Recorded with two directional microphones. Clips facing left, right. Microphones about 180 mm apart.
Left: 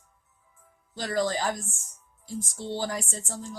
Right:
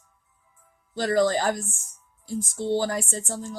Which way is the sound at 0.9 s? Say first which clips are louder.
Right 6 dB; 55° right (ahead or behind).